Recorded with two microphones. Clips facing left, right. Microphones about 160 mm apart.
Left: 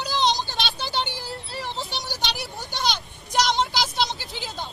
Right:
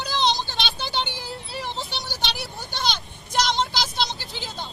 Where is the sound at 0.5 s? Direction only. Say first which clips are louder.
Even; centre (ahead or behind).